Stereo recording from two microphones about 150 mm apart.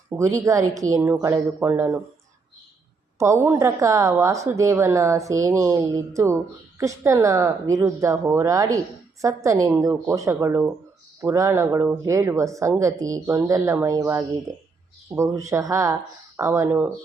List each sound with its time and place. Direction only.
0.1 s a woman's voice: 20° right (ahead or behind)
3.2 s a woman's voice: 20° right (ahead or behind)